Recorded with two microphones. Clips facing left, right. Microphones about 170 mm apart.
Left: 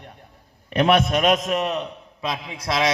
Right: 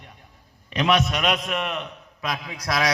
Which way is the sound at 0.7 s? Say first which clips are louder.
Left 4 dB; 55° left (ahead or behind).